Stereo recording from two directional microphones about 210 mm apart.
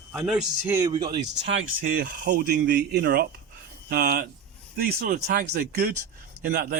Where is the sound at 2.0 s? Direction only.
45° right (ahead or behind).